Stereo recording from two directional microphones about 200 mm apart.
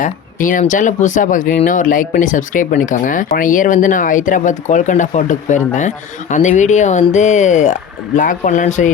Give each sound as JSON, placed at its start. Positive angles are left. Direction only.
{"t": 0.0, "sound": "speech", "side_deg": 40}